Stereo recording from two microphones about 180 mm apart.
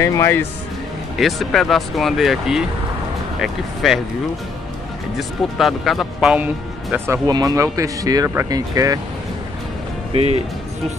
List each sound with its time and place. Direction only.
0.0 s speech: 15° left (ahead or behind)
1.1 s speech: centre (ahead or behind)
5.6 s speech: centre (ahead or behind); by 9.0 s 20° right (ahead or behind)
10.1 s speech: 35° right (ahead or behind)